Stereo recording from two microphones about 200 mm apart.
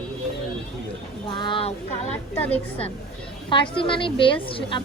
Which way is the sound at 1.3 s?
25° left (ahead or behind).